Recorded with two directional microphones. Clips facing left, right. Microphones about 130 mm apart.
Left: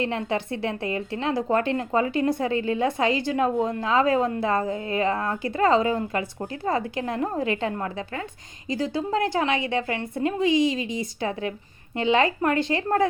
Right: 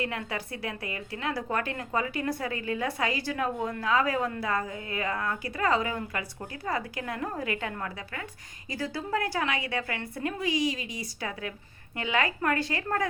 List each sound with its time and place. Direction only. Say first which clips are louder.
0.0 s a woman's voice: left 7 dB; 25° left (ahead or behind)